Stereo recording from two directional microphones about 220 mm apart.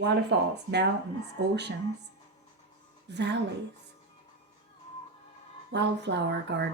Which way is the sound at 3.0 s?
50° right (ahead or behind).